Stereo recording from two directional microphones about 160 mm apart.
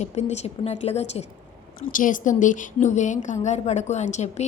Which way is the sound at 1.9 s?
55° left (ahead or behind).